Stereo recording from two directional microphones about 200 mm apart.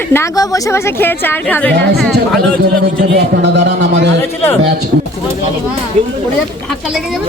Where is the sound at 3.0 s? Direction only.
55° right (ahead or behind).